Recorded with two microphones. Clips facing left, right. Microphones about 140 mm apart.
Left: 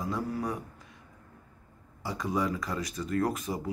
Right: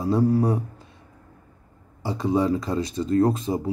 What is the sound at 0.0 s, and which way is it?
Speech, 35° right (ahead or behind).